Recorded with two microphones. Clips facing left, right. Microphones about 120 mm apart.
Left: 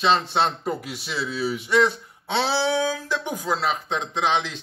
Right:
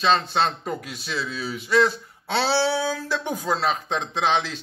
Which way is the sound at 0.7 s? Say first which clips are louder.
Left 1 dB; 25° left (ahead or behind).